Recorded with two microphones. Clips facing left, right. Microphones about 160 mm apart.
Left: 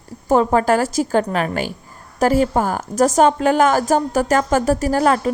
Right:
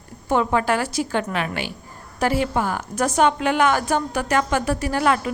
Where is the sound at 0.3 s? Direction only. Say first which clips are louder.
Left 5 dB; 40° left (ahead or behind).